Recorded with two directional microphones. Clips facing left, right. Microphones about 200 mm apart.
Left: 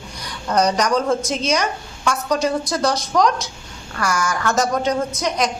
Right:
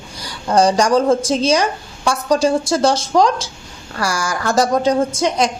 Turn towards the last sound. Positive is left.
turn(degrees=-30)  # may be behind; listen again after turning